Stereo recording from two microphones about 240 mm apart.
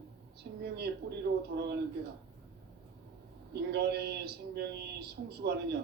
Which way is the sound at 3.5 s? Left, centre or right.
Right.